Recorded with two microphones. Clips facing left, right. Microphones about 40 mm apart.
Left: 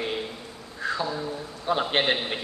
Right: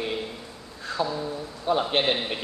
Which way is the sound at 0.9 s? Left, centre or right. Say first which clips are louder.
Right 4 dB; centre.